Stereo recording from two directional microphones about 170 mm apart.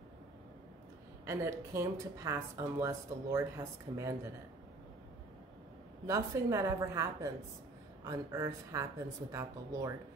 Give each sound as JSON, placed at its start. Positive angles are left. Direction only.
{"t": 1.2, "sound": "speech", "side_deg": -15}
{"t": 6.0, "sound": "speech", "side_deg": -15}